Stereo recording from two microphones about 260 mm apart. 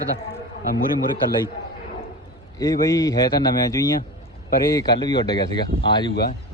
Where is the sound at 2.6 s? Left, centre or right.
Centre.